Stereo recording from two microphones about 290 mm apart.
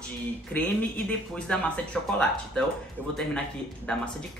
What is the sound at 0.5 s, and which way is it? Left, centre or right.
A man's voice, centre.